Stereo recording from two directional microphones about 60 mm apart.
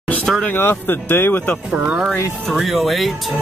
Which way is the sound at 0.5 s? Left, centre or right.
Left.